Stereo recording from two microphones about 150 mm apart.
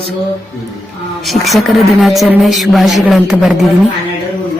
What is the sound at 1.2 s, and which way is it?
A woman's voice, centre (ahead or behind).